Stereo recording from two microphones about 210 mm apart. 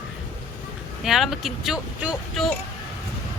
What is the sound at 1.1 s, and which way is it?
Speech, centre (ahead or behind).